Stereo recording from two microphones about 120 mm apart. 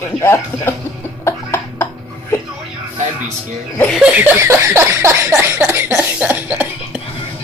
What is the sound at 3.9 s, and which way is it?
Laughter, 10° right (ahead or behind).